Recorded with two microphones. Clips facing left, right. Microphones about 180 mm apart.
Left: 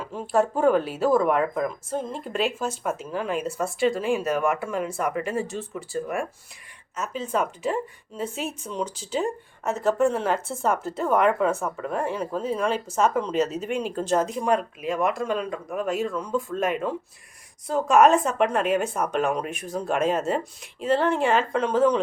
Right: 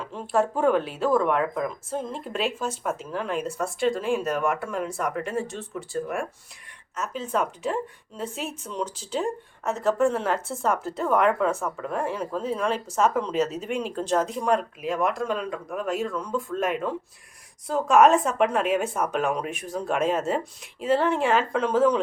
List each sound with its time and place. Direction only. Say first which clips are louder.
0.0 s a woman's voice: left 1 dB; 5° left (ahead or behind)